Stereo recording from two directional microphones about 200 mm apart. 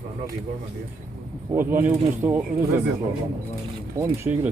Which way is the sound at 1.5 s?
10° right (ahead or behind).